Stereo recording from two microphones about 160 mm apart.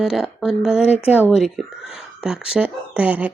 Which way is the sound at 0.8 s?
40° left (ahead or behind).